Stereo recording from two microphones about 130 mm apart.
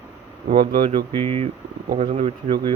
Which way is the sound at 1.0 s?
45° right (ahead or behind).